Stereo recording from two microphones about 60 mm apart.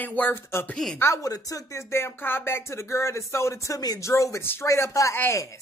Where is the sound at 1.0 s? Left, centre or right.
Left.